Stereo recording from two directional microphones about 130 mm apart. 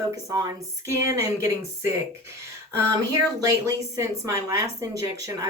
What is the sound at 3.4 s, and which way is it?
A woman's voice, 25° right (ahead or behind).